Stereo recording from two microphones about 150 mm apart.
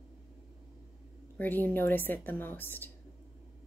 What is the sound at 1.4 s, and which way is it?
Speech, 10° left (ahead or behind).